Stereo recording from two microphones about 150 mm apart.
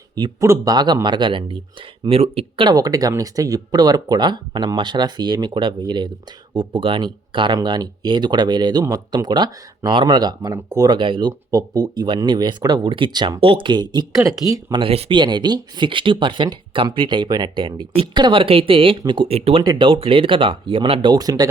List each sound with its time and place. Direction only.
0.2 s speech: 20° right (ahead or behind); by 2.7 s 35° right (ahead or behind)
2.7 s speech: 25° right (ahead or behind)
14.8 s speech: 40° right (ahead or behind)
15.2 s speech: 30° right (ahead or behind)